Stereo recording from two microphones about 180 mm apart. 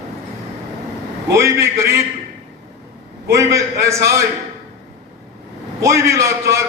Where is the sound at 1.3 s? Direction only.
15° right (ahead or behind).